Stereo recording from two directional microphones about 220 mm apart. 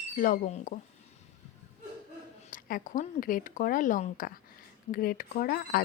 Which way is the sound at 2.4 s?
40° left (ahead or behind).